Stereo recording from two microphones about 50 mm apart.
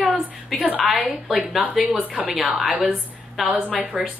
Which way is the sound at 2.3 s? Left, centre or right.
Centre.